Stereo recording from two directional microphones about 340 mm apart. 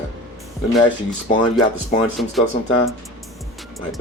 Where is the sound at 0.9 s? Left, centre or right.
Centre.